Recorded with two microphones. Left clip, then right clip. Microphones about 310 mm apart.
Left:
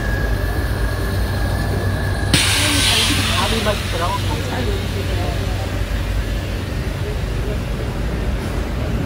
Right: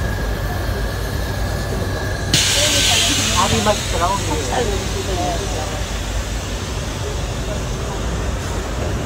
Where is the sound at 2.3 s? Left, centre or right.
Centre.